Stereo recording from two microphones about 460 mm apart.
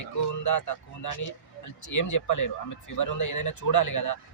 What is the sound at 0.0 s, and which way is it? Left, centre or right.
Speech, left.